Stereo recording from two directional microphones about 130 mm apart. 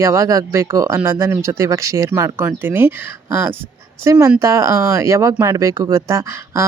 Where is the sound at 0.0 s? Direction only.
25° right (ahead or behind).